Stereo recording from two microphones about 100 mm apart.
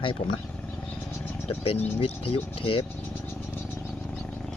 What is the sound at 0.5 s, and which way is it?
Wild animals, 15° left (ahead or behind).